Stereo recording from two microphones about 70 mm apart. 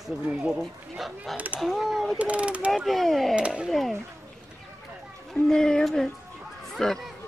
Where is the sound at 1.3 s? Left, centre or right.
Right.